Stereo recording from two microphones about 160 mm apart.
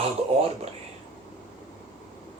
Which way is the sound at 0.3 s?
40° right (ahead or behind).